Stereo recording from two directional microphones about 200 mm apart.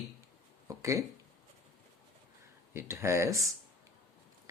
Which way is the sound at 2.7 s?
15° right (ahead or behind).